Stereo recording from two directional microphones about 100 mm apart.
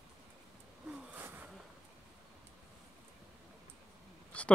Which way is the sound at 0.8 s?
10° right (ahead or behind).